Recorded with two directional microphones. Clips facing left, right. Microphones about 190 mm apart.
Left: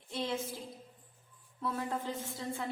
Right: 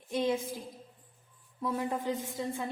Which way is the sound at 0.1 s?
15° right (ahead or behind).